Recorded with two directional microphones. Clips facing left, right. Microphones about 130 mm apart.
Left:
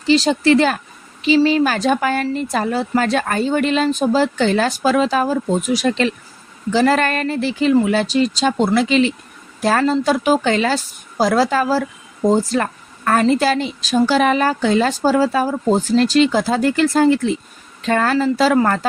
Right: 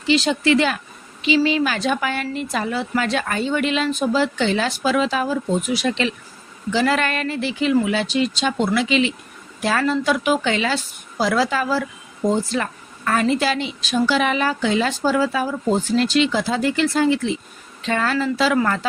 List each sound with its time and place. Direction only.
0.1 s speech: 40° left (ahead or behind)